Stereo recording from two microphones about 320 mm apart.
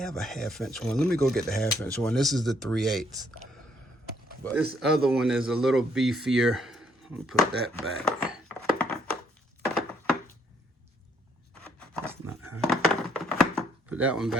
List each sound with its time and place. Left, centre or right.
0.0 s speech: centre
4.5 s speech: centre
7.3 s a sound: centre
12.4 s cutlery: right
12.6 s a sound: centre
13.9 s speech: centre